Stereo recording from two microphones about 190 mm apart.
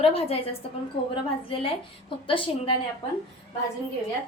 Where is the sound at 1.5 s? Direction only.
30° left (ahead or behind).